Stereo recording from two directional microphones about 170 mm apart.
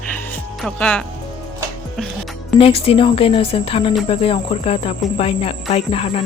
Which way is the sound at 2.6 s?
35° left (ahead or behind).